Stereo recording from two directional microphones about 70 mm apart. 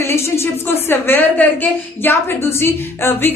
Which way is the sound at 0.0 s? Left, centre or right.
Left.